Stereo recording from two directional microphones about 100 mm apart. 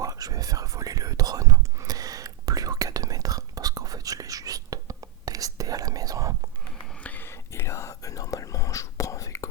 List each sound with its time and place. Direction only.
0.0 s whispering: 35° right (ahead or behind)
7.0 s whispering: 20° left (ahead or behind)